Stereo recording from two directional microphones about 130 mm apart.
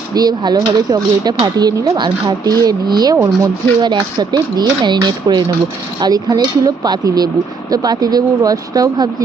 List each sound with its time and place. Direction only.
0.1 s speech: 30° right (ahead or behind)